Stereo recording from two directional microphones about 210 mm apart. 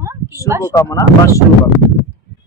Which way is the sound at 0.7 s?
15° left (ahead or behind).